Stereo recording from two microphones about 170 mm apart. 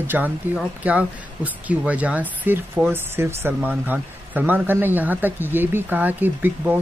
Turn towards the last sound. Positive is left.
turn(degrees=-10)  # may be behind; listen again after turning